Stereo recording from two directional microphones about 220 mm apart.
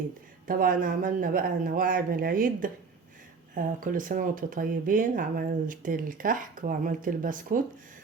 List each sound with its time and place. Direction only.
0.4 s speech: 40° right (ahead or behind)